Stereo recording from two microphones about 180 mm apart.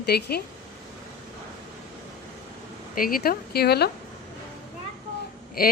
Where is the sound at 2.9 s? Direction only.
50° left (ahead or behind).